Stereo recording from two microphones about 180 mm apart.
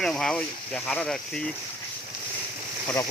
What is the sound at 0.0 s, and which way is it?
Speech, 5° left (ahead or behind).